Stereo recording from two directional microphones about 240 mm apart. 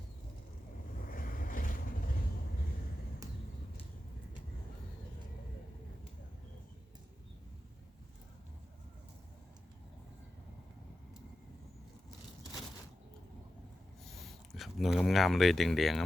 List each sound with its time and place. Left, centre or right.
1.0 s vehicle: left
14.0 s speech: centre